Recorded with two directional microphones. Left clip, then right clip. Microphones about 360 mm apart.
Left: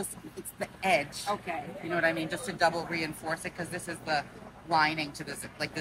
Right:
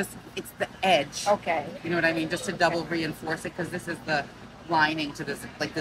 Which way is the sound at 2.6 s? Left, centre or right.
Centre.